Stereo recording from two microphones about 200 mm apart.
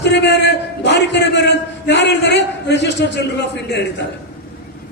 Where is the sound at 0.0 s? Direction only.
60° left (ahead or behind).